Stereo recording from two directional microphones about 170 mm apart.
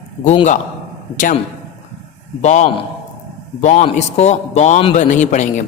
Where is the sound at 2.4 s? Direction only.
45° left (ahead or behind).